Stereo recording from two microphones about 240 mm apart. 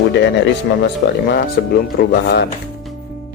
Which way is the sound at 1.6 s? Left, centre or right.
Left.